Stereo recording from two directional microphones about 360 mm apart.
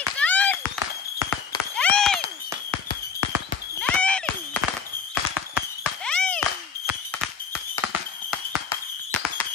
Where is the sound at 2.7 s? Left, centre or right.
Left.